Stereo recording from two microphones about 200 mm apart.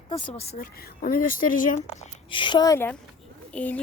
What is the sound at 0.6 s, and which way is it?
Speech, 45° left (ahead or behind).